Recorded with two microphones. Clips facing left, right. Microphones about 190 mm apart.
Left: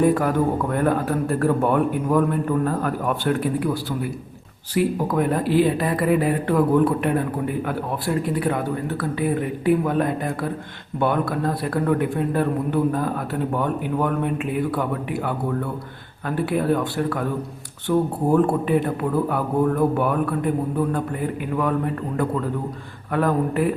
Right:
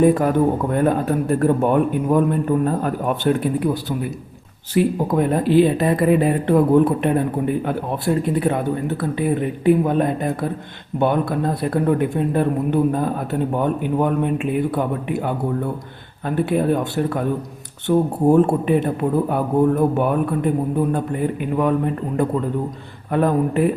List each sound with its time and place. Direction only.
0.0 s speech: 25° right (ahead or behind)